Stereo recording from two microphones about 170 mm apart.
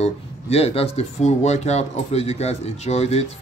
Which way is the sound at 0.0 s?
40° left (ahead or behind).